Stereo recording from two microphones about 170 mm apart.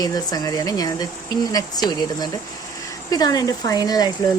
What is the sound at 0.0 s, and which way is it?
Speech, 20° left (ahead or behind).